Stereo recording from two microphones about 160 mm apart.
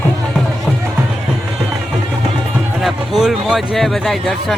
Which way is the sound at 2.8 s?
Centre (ahead or behind).